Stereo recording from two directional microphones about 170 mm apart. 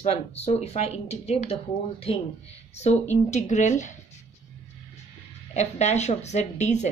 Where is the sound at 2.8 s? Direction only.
45° left (ahead or behind).